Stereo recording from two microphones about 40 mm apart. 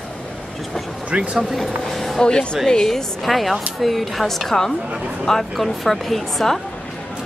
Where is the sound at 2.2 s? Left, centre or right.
Left.